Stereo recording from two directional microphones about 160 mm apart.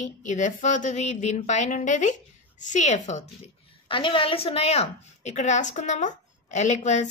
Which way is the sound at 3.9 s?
30° left (ahead or behind).